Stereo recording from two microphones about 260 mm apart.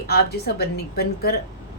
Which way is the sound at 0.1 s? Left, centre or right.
Left.